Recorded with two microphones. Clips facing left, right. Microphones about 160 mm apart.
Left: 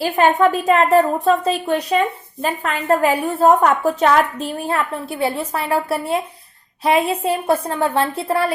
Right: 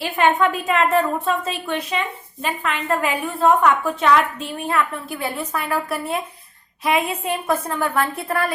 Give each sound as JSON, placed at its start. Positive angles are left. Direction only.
{"t": 0.0, "sound": "a woman's voice", "side_deg": 40}